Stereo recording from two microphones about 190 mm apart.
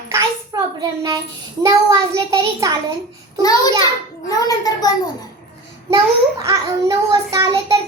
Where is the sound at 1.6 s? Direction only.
20° right (ahead or behind).